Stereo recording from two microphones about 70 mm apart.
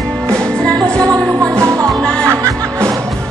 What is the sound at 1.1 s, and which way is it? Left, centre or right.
Music, right.